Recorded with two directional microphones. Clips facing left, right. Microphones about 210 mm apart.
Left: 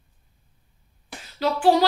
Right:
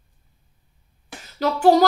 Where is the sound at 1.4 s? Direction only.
45° right (ahead or behind).